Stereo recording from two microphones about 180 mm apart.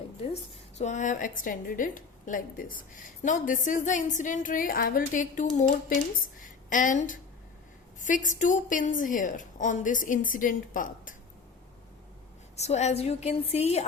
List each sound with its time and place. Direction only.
0.8 s a woman's voice: 40° left (ahead or behind)
12.5 s a woman's voice: 40° left (ahead or behind)